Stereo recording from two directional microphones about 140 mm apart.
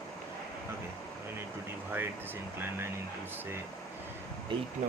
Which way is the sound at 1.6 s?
15° right (ahead or behind).